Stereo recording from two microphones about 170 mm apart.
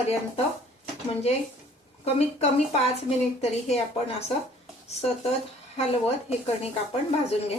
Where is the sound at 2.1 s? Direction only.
40° left (ahead or behind).